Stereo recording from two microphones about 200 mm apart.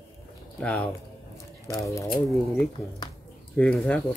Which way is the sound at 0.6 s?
5° left (ahead or behind).